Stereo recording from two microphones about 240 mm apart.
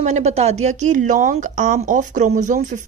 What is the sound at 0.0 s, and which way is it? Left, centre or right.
Speech, right.